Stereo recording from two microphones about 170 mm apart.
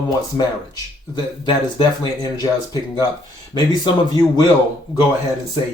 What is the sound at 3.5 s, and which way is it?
Speech, 25° left (ahead or behind).